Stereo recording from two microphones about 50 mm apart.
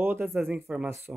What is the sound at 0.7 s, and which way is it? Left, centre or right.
Speech, centre.